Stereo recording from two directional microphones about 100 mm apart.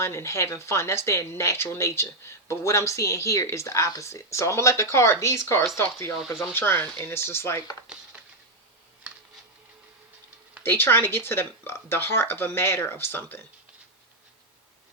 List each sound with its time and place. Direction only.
0.0 s speech: 25° left (ahead or behind)
10.6 s speech: 25° left (ahead or behind)